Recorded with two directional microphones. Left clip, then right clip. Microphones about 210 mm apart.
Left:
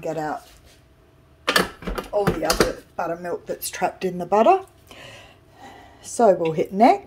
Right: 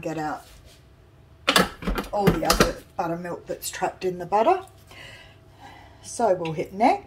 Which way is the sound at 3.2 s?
50° left (ahead or behind).